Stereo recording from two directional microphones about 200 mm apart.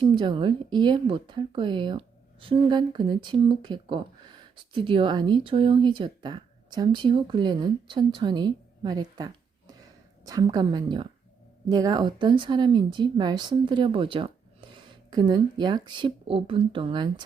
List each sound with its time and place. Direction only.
0.0 s a woman's voice: 25° right (ahead or behind)